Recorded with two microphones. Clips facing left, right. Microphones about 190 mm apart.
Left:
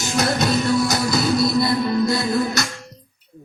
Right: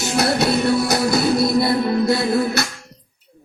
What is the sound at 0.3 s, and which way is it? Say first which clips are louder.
Music: right 1 dB; 60° right (ahead or behind).